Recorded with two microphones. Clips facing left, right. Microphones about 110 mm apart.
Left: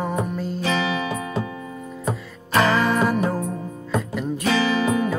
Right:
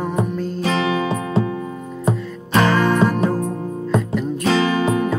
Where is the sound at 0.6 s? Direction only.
30° right (ahead or behind).